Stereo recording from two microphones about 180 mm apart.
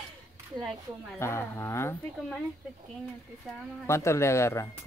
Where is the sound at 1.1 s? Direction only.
15° left (ahead or behind).